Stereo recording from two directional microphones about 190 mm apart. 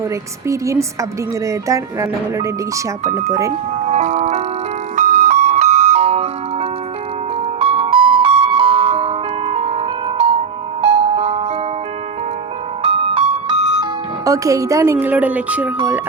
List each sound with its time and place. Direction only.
0.4 s speech: 15° right (ahead or behind)
3.8 s music: 40° right (ahead or behind)
12.8 s music: 30° right (ahead or behind)
14.3 s speech: 15° right (ahead or behind)